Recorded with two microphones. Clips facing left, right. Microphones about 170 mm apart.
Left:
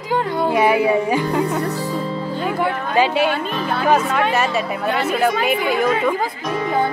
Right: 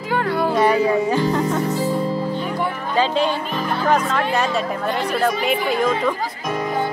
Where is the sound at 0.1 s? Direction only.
20° left (ahead or behind).